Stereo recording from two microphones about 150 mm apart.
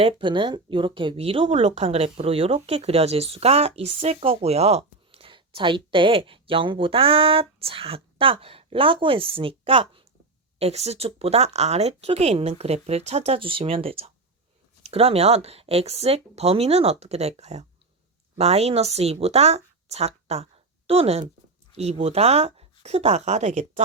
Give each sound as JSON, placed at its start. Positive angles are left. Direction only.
{"t": 0.0, "sound": "a woman's voice", "side_deg": -35}